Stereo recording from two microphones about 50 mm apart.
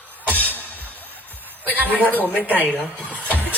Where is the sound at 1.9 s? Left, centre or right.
Left.